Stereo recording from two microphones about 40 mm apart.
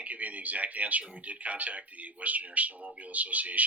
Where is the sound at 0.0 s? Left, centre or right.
Right.